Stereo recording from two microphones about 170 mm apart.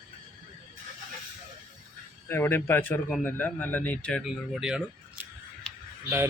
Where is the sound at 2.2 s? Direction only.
15° left (ahead or behind).